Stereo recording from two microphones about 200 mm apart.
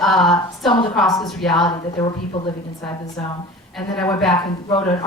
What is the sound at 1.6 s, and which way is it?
A woman's voice, 25° left (ahead or behind).